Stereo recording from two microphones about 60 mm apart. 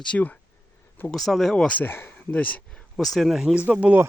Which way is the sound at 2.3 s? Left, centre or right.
Left.